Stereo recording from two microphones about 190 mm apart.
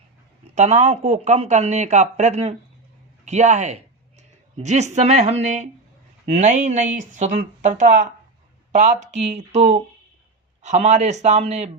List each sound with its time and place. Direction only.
0.5 s speech: 35° right (ahead or behind)